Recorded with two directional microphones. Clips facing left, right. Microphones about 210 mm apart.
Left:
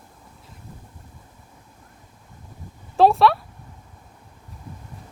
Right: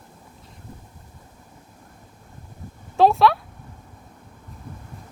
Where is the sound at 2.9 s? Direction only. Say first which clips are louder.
Left 1 dB; centre (ahead or behind).